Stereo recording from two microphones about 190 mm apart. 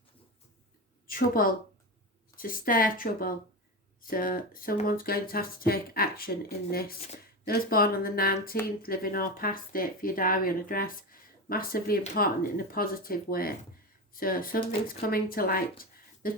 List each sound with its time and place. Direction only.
1.0 s a woman's voice: 50° left (ahead or behind)